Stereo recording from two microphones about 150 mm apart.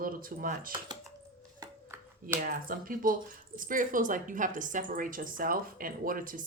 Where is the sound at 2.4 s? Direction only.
70° right (ahead or behind).